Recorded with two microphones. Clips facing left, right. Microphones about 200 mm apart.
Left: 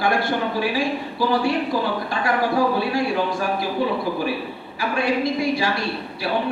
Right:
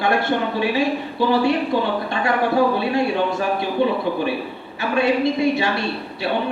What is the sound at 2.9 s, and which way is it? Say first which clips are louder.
Speech: right 2 dB; 25° right (ahead or behind).